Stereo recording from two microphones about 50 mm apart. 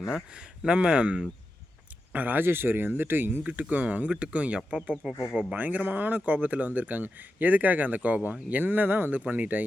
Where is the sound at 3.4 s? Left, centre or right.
Right.